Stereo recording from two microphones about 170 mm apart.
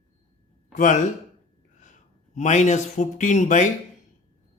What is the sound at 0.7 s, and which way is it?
A man's voice, 45° left (ahead or behind).